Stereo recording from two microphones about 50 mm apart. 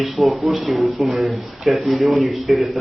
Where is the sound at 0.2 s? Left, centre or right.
Centre.